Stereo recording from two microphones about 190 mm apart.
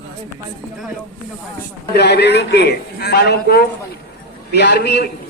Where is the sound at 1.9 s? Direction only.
60° left (ahead or behind).